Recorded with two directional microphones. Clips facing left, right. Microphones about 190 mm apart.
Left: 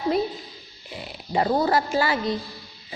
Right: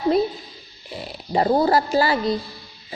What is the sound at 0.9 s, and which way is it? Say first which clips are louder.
A woman's voice: right 3 dB; 35° right (ahead or behind).